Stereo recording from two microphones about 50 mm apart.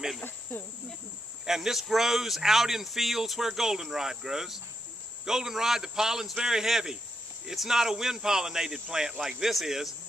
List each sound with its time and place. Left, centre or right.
0.2 s cricket: left
1.4 s speech: centre